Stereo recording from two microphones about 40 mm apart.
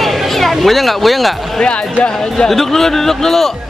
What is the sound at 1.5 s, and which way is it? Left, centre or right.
Speech, left.